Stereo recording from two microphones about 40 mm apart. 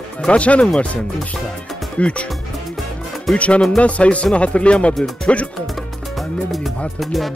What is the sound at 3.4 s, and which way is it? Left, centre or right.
Music, left.